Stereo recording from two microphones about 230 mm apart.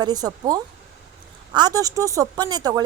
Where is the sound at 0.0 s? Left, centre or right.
Centre.